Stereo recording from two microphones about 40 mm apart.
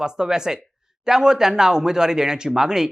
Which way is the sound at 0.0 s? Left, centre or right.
Centre.